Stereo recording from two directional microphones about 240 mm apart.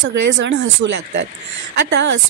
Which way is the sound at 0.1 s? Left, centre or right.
Right.